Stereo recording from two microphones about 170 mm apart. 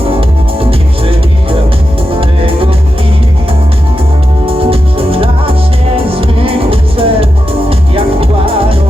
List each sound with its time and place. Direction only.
0.2 s music: 35° right (ahead or behind)
4.4 s music: 35° right (ahead or behind)